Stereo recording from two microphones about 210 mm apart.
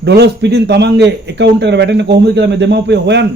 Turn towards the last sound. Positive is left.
turn(degrees=-55)  # may be behind; listen again after turning